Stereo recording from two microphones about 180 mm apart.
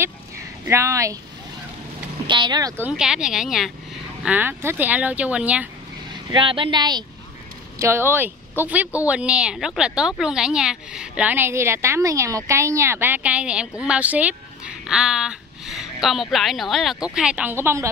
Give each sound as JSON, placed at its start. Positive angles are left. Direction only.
{"t": 0.7, "sound": "speech", "side_deg": -15}
{"t": 2.2, "sound": "speech", "side_deg": -25}
{"t": 2.8, "sound": "speech", "side_deg": -5}
{"t": 6.3, "sound": "speech", "side_deg": -30}
{"t": 7.8, "sound": "speech", "side_deg": -15}